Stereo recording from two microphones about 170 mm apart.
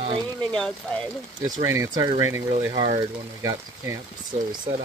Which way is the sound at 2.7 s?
35° right (ahead or behind).